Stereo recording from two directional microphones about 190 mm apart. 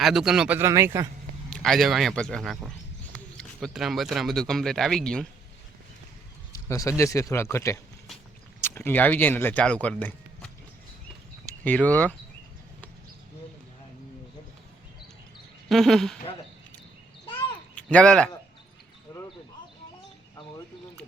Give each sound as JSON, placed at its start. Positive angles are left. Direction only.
{"t": 0.0, "sound": "a man's voice", "side_deg": 0}
{"t": 1.5, "sound": "speech", "side_deg": 5}
{"t": 6.7, "sound": "speech", "side_deg": 15}
{"t": 11.6, "sound": "speech", "side_deg": 5}
{"t": 15.7, "sound": "speech", "side_deg": 0}
{"t": 17.7, "sound": "speech", "side_deg": 5}